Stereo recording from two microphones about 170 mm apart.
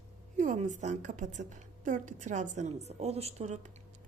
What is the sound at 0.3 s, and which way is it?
A woman's voice, 45° right (ahead or behind).